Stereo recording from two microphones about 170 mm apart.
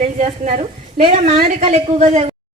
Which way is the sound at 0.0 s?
45° right (ahead or behind).